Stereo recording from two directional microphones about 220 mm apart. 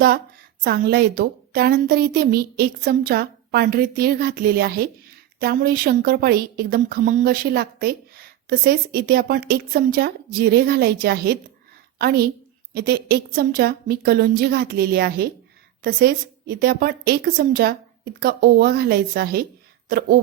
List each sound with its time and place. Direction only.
0.6 s a woman's voice: 45° right (ahead or behind)